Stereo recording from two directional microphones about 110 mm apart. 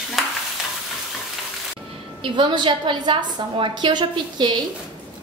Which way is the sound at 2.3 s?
45° right (ahead or behind).